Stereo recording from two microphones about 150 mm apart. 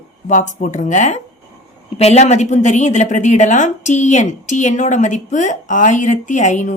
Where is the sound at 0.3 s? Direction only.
55° left (ahead or behind).